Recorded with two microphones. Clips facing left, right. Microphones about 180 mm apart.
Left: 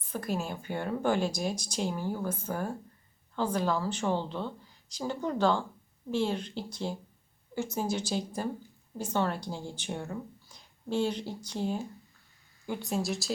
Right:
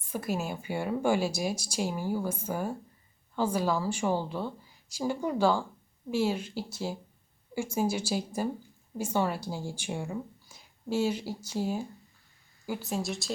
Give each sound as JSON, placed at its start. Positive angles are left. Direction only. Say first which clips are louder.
{"t": 0.1, "sound": "a woman's voice", "louder": "right 1 dB", "side_deg": -5}